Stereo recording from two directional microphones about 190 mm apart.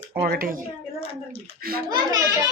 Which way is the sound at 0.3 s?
50° right (ahead or behind).